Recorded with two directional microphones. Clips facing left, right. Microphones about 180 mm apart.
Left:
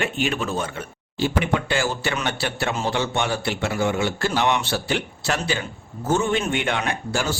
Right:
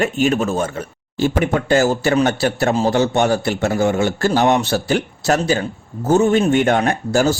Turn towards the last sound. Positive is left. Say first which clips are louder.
# right 9 dB
turn(degrees=-40)  # may be behind; listen again after turning